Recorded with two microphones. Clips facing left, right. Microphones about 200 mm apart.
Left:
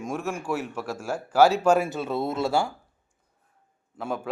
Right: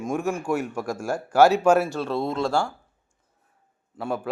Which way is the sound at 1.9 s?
5° left (ahead or behind).